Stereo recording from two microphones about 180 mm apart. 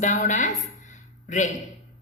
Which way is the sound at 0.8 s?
45° left (ahead or behind).